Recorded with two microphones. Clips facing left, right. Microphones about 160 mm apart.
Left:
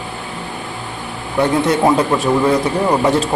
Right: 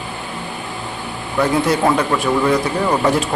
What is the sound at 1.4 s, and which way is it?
Speech, 25° left (ahead or behind).